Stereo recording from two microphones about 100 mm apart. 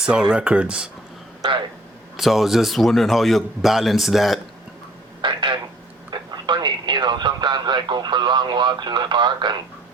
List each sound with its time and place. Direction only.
0.0 s speech: 10° right (ahead or behind)
1.4 s speech: 55° right (ahead or behind)
2.1 s a man's voice: centre (ahead or behind)
5.2 s telephone: 50° right (ahead or behind)
6.1 s speech: 50° right (ahead or behind)